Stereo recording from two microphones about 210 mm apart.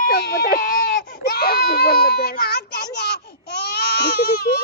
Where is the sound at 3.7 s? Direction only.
50° left (ahead or behind).